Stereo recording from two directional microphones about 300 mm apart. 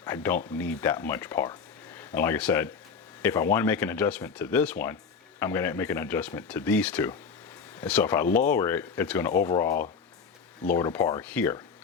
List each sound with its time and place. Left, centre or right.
0.0 s speech: centre
9.6 s speech: left
10.7 s speech: centre